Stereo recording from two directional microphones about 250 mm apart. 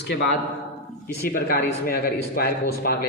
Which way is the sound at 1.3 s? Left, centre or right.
Left.